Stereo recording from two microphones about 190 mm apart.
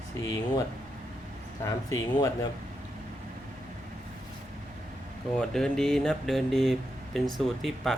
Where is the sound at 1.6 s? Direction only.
15° left (ahead or behind).